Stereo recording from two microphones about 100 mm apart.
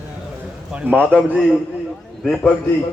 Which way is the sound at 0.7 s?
10° right (ahead or behind).